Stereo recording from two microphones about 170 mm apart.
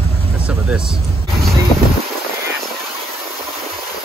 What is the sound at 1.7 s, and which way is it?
Music, 35° left (ahead or behind).